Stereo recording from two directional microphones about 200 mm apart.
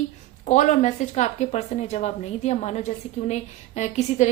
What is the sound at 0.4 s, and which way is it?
A woman's voice, 40° left (ahead or behind).